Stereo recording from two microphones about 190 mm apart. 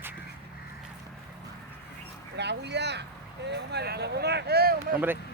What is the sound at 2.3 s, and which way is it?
Speech, 65° right (ahead or behind).